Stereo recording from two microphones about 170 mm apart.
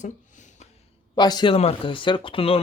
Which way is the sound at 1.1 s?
25° left (ahead or behind).